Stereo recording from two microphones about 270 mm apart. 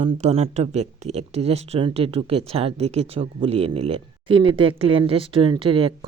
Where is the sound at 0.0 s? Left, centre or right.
Right.